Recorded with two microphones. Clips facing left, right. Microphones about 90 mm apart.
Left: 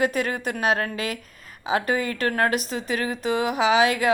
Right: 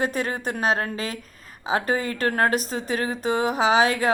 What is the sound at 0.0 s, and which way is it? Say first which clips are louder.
A woman's voice: left 2 dB; 35° right (ahead or behind).